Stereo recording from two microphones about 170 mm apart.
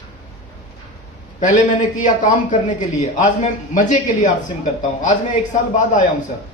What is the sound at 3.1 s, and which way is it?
A man's voice, 45° left (ahead or behind).